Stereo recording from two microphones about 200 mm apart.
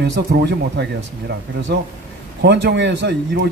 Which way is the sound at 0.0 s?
55° right (ahead or behind).